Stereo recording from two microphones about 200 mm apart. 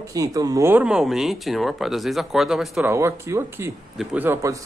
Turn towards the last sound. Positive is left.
turn(degrees=-15)  # may be behind; listen again after turning